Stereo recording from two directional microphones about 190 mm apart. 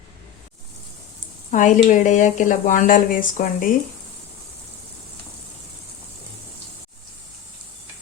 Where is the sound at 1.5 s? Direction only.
40° left (ahead or behind).